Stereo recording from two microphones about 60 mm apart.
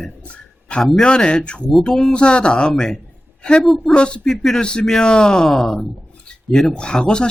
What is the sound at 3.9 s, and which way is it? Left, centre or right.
Speech, centre.